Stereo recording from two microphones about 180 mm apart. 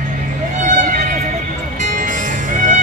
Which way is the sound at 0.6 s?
45° right (ahead or behind).